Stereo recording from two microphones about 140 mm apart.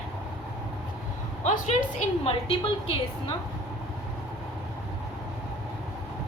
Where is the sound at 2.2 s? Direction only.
40° left (ahead or behind).